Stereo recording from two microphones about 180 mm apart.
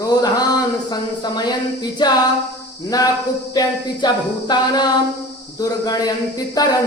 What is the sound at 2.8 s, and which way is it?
Speech, 20° left (ahead or behind).